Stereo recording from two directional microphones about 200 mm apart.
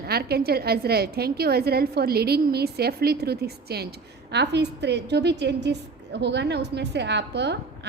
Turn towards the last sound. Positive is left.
turn(degrees=-60)  # may be behind; listen again after turning